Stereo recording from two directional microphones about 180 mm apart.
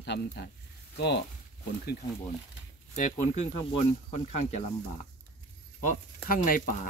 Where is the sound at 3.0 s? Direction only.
45° left (ahead or behind).